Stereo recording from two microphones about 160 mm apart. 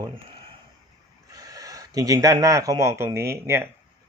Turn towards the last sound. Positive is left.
turn(degrees=-15)  # may be behind; listen again after turning